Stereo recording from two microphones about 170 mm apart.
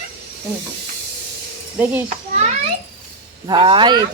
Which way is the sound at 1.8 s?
10° right (ahead or behind).